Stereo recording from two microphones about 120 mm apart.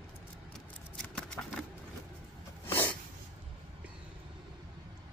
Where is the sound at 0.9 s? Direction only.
5° left (ahead or behind).